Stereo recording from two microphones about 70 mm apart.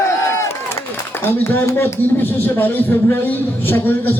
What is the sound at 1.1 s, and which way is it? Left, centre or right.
A man's voice, left.